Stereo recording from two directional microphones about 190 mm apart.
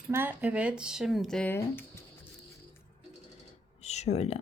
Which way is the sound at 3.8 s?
35° left (ahead or behind).